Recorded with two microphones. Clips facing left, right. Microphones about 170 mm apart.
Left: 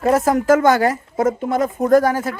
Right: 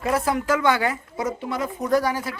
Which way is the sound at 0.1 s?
45° left (ahead or behind).